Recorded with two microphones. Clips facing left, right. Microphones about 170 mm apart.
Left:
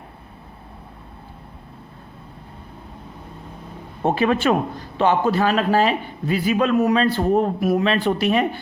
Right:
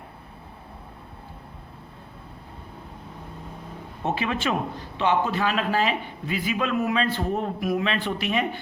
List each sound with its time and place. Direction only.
4.0 s a man's voice: 50° left (ahead or behind)